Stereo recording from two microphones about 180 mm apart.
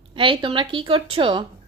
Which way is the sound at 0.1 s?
25° right (ahead or behind).